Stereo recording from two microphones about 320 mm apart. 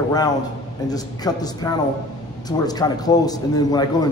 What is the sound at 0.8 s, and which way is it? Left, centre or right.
A man's voice, centre.